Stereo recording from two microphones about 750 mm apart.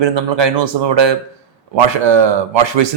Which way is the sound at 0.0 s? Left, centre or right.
Right.